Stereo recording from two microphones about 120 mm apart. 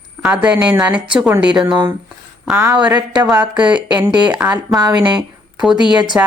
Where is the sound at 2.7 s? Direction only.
10° right (ahead or behind).